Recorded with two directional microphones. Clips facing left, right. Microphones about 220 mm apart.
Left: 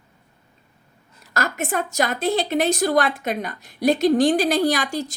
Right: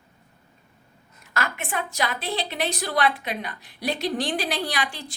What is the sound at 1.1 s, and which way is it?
A woman's voice, 40° left (ahead or behind).